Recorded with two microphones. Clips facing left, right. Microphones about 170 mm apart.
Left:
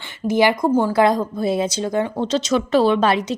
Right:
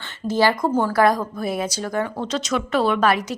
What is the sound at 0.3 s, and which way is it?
A woman's voice, 15° left (ahead or behind).